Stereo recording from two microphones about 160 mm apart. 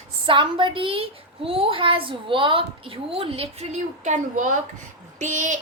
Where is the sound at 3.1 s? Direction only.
35° right (ahead or behind).